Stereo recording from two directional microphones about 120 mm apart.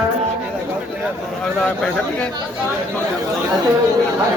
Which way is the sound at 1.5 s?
5° left (ahead or behind).